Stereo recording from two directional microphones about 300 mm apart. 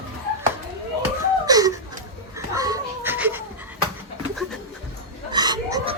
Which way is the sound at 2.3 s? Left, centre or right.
Centre.